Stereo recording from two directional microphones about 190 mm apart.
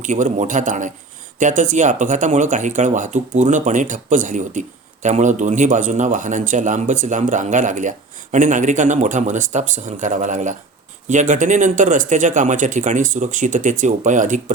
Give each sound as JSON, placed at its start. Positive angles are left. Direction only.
{"t": 0.0, "sound": "a man's voice", "side_deg": -40}